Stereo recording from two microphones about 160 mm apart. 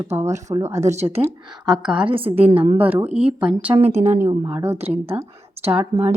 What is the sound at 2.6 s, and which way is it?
Speech, 10° right (ahead or behind).